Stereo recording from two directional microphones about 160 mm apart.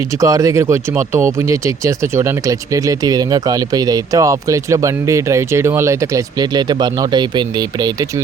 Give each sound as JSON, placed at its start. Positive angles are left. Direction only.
{"t": 0.2, "sound": "speech", "side_deg": -20}